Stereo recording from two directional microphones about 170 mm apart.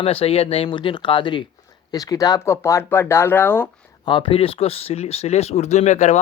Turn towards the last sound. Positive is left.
turn(degrees=45)  # may be behind; listen again after turning